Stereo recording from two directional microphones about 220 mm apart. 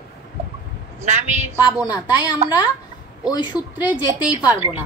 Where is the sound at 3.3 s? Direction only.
20° left (ahead or behind).